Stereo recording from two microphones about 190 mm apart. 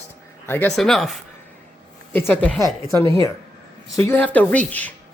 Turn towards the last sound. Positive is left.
turn(degrees=5)  # may be behind; listen again after turning